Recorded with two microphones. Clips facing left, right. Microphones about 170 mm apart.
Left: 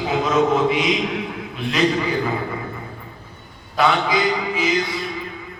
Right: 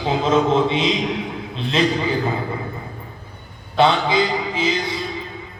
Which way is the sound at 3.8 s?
25° right (ahead or behind).